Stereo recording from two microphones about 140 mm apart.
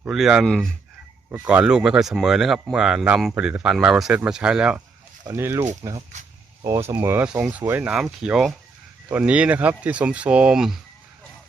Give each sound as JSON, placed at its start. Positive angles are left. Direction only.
{"t": 0.0, "sound": "speech", "side_deg": -5}
{"t": 1.3, "sound": "speech", "side_deg": -10}
{"t": 5.3, "sound": "speech", "side_deg": -20}